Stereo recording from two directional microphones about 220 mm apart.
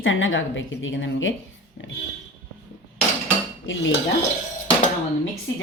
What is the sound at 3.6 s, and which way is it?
Dishes, 60° left (ahead or behind).